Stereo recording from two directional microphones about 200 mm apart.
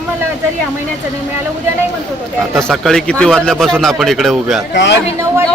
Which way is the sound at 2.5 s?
Centre (ahead or behind).